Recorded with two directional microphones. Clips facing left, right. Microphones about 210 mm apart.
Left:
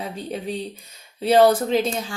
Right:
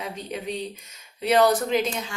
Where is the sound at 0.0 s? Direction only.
30° left (ahead or behind).